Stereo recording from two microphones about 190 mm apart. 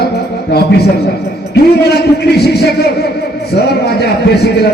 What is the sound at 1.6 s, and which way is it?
A man's voice, 55° left (ahead or behind).